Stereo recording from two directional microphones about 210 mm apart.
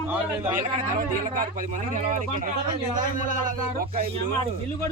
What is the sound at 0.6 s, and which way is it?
Speech, 40° right (ahead or behind).